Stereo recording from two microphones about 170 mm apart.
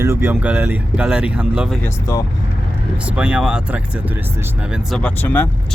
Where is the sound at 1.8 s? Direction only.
20° left (ahead or behind).